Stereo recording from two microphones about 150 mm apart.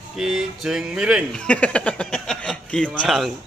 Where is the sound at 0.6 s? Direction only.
5° right (ahead or behind).